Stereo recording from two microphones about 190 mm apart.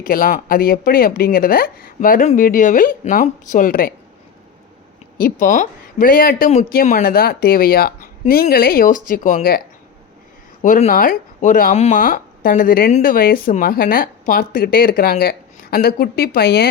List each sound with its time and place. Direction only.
0.0 s speech: 45° left (ahead or behind)
5.1 s speech: 45° left (ahead or behind)
10.6 s speech: 45° left (ahead or behind)